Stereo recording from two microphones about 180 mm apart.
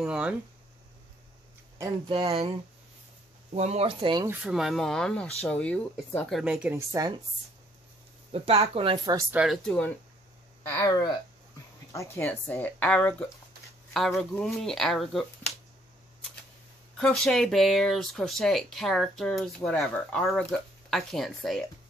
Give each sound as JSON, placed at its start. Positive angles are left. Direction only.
{"t": 0.0, "sound": "speech", "side_deg": -5}
{"t": 1.8, "sound": "speech", "side_deg": -20}
{"t": 3.5, "sound": "speech", "side_deg": -35}
{"t": 4.3, "sound": "speech", "side_deg": -5}
{"t": 8.3, "sound": "speech", "side_deg": -35}
{"t": 9.3, "sound": "speech", "side_deg": -5}
{"t": 10.7, "sound": "speech", "side_deg": 20}
{"t": 16.9, "sound": "speech", "side_deg": 5}